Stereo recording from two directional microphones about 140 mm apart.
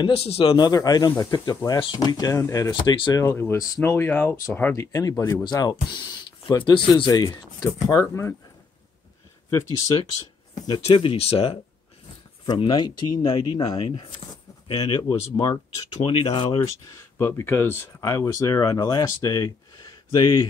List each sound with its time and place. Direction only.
0.0 s a man's voice: 45° left (ahead or behind)
0.6 s speech: 25° left (ahead or behind)
2.7 s speech: 35° left (ahead or behind); by 4.7 s 10° left (ahead or behind)
4.7 s speech: 25° left (ahead or behind)
10.5 s speech: 30° left (ahead or behind)
12.4 s speech: 30° left (ahead or behind)
16.9 s speech: 20° left (ahead or behind)